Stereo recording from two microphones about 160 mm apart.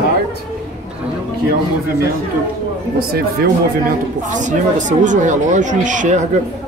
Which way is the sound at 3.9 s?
50° right (ahead or behind).